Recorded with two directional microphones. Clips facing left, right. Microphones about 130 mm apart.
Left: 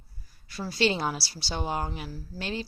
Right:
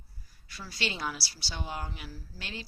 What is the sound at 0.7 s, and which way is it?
A woman's voice, 30° left (ahead or behind).